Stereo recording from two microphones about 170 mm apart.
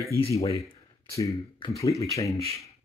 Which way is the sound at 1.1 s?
20° left (ahead or behind).